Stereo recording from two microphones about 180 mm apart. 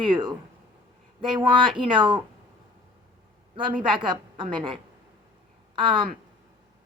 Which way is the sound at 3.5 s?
30° right (ahead or behind).